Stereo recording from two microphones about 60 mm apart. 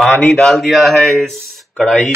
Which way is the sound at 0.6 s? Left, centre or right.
Centre.